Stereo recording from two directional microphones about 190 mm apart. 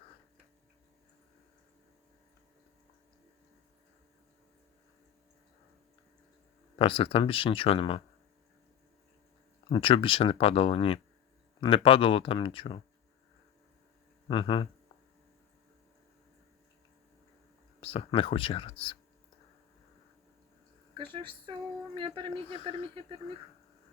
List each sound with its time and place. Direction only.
6.7 s speech: 30° left (ahead or behind)
9.6 s speech: 30° left (ahead or behind)
14.3 s speech: 25° left (ahead or behind)
17.7 s speech: 30° left (ahead or behind)
20.9 s speech: 25° right (ahead or behind)